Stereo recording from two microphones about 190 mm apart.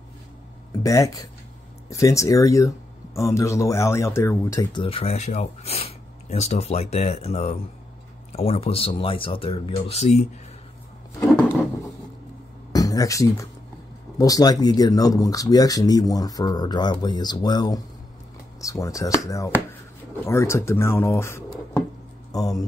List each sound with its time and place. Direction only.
0.8 s speech: 15° left (ahead or behind); by 10.2 s 35° left (ahead or behind)
12.7 s speech: 20° left (ahead or behind)